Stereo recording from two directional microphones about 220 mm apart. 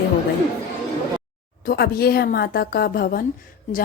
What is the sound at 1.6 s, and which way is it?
A woman's voice, 45° left (ahead or behind).